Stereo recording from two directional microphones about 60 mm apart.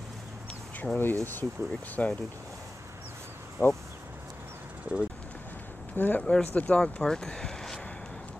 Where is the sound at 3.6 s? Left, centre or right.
Right.